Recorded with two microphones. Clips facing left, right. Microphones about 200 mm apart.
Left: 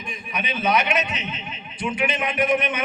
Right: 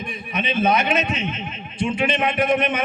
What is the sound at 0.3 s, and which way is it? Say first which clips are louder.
Speech: right 3 dB; 25° right (ahead or behind).